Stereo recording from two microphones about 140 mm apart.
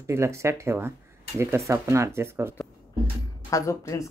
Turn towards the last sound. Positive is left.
turn(degrees=20)  # may be behind; listen again after turning